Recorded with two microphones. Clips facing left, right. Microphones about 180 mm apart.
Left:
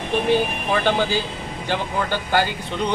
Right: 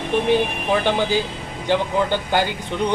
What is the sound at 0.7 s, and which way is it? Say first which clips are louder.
Speech: right 1 dB; 15° right (ahead or behind).